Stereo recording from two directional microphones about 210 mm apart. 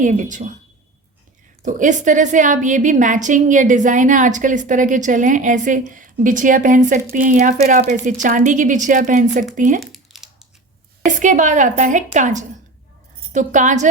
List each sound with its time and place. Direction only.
0.0 s a woman's voice: 35° right (ahead or behind)
1.6 s a woman's voice: 35° right (ahead or behind)
9.8 s a sound: centre (ahead or behind)
11.0 s a woman's voice: 35° right (ahead or behind)